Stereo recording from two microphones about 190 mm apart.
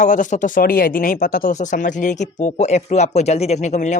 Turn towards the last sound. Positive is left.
turn(degrees=40)  # may be behind; listen again after turning